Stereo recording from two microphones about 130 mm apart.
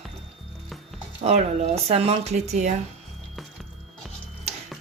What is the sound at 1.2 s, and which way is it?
A woman's voice, 55° right (ahead or behind).